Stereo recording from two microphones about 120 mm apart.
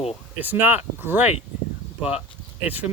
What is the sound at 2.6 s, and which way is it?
Speech, 15° right (ahead or behind).